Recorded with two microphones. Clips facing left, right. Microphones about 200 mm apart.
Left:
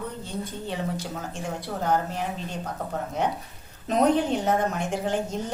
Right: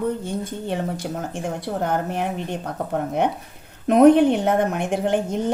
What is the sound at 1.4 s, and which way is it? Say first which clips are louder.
A woman's voice: right 5 dB; 55° right (ahead or behind).